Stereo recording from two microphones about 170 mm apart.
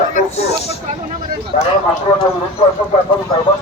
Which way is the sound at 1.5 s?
45° left (ahead or behind).